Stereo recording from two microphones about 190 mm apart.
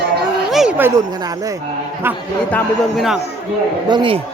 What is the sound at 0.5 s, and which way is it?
Speech, 5° right (ahead or behind).